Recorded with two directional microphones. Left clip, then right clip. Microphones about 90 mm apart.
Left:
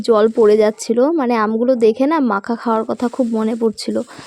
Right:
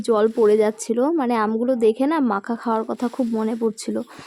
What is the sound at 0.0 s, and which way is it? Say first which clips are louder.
Speech: left 5 dB; 25° left (ahead or behind).